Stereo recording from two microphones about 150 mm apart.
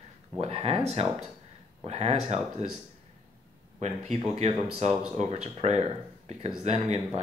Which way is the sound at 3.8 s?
50° right (ahead or behind).